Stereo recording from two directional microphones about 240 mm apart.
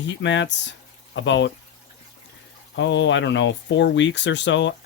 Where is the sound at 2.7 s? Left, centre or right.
Left.